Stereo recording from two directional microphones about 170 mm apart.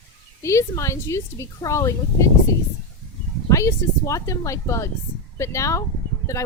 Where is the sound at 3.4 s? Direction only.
20° left (ahead or behind).